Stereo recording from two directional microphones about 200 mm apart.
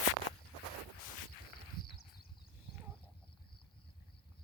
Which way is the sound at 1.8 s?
45° left (ahead or behind).